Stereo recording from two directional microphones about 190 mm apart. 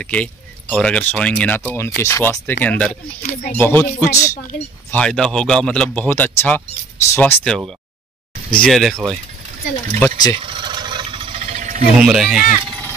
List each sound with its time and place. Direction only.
0.0 s speech: 5° left (ahead or behind)
4.9 s speech: 5° left (ahead or behind)
9.9 s speech: 10° left (ahead or behind)
10.3 s a sound: 25° right (ahead or behind)
12.0 s speech: centre (ahead or behind)